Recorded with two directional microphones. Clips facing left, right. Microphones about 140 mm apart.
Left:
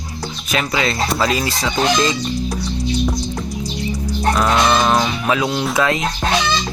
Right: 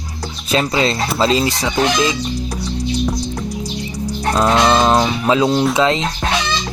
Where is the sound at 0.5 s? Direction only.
30° right (ahead or behind).